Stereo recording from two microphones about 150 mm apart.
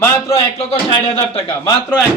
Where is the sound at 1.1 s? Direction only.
40° left (ahead or behind).